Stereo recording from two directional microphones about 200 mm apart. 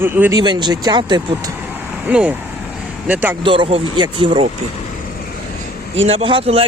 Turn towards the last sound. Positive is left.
turn(degrees=-30)  # may be behind; listen again after turning